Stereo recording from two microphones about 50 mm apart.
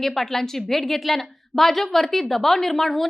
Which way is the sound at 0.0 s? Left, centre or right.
Centre.